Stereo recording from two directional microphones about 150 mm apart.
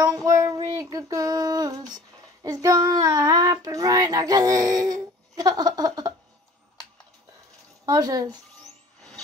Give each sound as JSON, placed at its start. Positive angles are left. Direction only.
{"t": 0.0, "sound": "child singing", "side_deg": -25}
{"t": 7.8, "sound": "speech", "side_deg": -25}